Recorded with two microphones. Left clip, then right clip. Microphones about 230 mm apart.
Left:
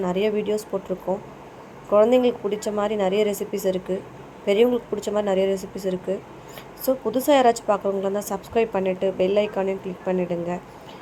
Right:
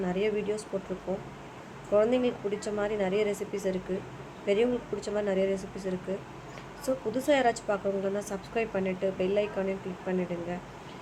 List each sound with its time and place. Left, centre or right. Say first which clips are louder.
0.0 s speech: left 7 dB; left